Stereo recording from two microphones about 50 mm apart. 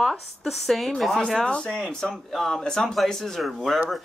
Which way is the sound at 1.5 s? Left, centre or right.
Centre.